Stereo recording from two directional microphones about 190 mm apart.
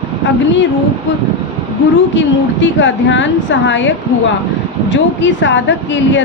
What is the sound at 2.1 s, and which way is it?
Speech, 75° left (ahead or behind).